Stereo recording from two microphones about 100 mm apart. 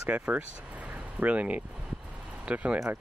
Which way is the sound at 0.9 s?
15° right (ahead or behind).